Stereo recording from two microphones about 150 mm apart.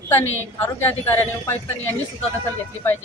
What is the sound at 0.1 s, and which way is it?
A man's voice, 15° left (ahead or behind).